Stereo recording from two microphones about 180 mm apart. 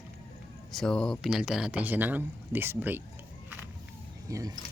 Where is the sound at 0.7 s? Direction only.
5° left (ahead or behind).